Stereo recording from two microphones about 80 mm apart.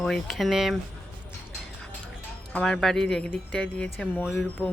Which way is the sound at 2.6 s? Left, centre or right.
Centre.